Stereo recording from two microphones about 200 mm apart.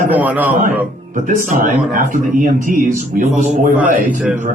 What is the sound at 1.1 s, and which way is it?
Speech, 40° right (ahead or behind).